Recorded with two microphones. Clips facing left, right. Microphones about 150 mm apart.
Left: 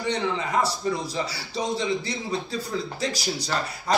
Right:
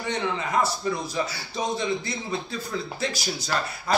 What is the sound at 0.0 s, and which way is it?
A man's voice, 35° left (ahead or behind).